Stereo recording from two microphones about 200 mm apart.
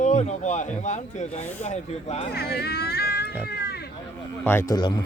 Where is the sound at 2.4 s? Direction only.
50° left (ahead or behind).